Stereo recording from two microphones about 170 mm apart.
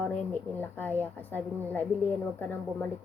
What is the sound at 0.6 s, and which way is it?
A woman's voice, 10° left (ahead or behind).